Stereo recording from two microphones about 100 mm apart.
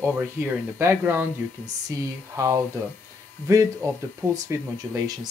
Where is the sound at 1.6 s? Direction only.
35° right (ahead or behind).